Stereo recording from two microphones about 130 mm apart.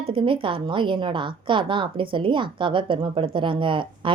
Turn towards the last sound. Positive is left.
turn(degrees=-40)  # may be behind; listen again after turning